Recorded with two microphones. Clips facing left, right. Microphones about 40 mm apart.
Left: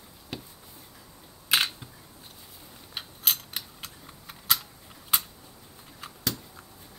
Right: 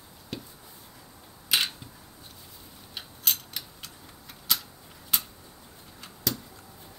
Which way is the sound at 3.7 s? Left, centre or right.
Centre.